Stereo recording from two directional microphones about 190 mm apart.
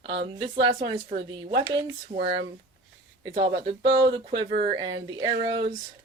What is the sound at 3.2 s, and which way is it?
Speech, 30° right (ahead or behind).